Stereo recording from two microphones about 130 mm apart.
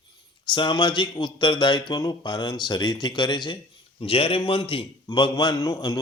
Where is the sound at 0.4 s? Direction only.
40° left (ahead or behind).